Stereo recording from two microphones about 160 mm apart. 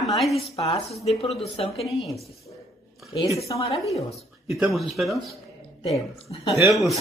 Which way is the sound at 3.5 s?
30° left (ahead or behind).